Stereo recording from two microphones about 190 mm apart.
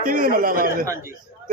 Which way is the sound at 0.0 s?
45° right (ahead or behind).